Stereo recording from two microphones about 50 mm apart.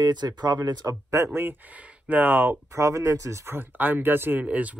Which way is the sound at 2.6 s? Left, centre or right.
Right.